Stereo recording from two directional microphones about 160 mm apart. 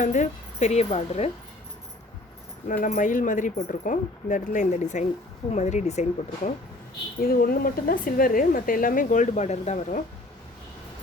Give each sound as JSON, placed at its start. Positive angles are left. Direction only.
{"t": 0.0, "sound": "speech", "side_deg": 50}
{"t": 2.6, "sound": "speech", "side_deg": 55}
{"t": 7.2, "sound": "speech", "side_deg": 70}